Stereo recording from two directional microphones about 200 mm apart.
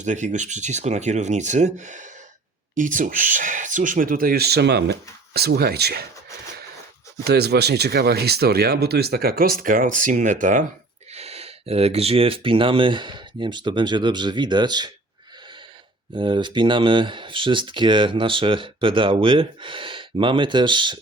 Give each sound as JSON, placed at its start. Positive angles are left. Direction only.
{"t": 0.0, "sound": "speech", "side_deg": -35}
{"t": 7.3, "sound": "speech", "side_deg": -55}
{"t": 16.1, "sound": "speech", "side_deg": -25}